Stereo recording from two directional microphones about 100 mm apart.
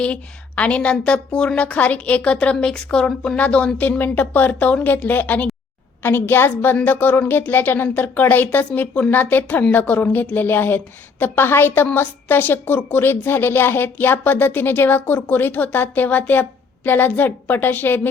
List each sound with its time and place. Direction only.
0.0 s a woman's voice: 10° left (ahead or behind)